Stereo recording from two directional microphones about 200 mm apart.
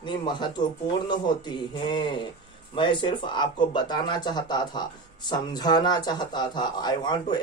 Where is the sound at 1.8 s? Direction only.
25° left (ahead or behind).